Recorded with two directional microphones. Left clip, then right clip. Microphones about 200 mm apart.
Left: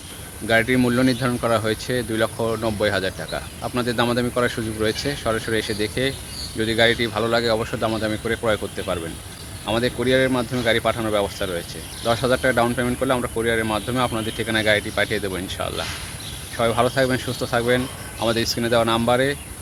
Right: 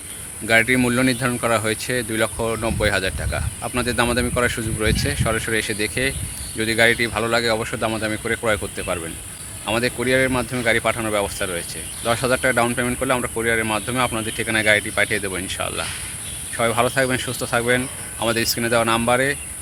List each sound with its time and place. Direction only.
0.4 s speech: 25° right (ahead or behind)